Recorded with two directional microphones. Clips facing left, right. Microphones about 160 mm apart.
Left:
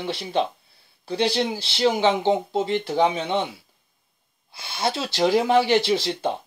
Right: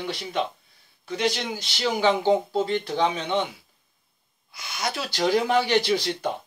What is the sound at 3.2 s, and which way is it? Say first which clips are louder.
Speech: left 1 dB; 30° left (ahead or behind).